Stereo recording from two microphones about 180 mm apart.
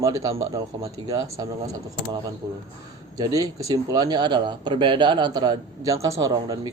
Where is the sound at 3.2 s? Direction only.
20° right (ahead or behind).